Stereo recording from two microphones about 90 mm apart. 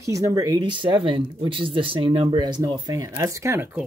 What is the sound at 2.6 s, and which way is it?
Speech, 40° right (ahead or behind).